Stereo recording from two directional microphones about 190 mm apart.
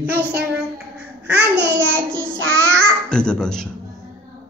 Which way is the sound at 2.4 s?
90° right.